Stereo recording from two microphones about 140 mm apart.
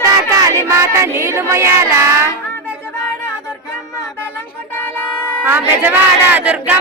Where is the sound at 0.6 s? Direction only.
20° right (ahead or behind).